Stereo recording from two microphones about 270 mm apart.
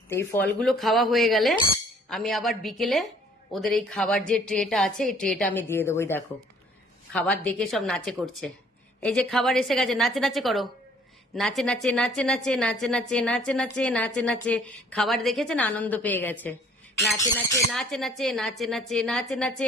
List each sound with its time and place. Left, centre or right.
0.1 s a woman's voice: centre